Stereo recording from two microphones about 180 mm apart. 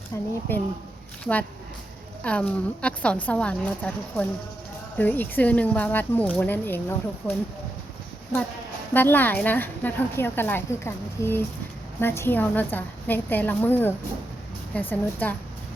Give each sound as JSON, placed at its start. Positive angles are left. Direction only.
{"t": 0.1, "sound": "speech", "side_deg": 15}
{"t": 8.9, "sound": "speech", "side_deg": 10}